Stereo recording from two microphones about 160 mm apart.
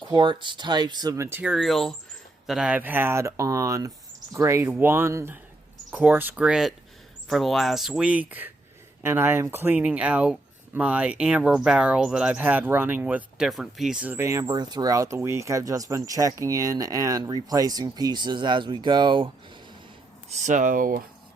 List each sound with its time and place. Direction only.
0.1 s speech: 30° right (ahead or behind)
20.4 s speech: 55° right (ahead or behind)